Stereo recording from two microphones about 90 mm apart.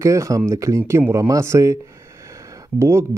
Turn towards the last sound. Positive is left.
turn(degrees=-30)  # may be behind; listen again after turning